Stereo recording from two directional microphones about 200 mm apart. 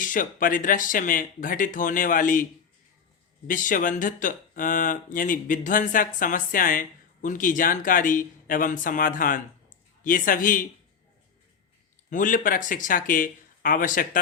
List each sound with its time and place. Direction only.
0.0 s speech: 40° left (ahead or behind)
12.1 s speech: 40° left (ahead or behind)